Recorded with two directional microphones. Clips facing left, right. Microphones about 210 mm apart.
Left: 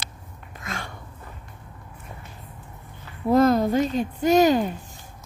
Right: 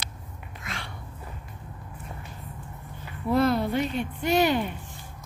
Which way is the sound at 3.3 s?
45° left (ahead or behind).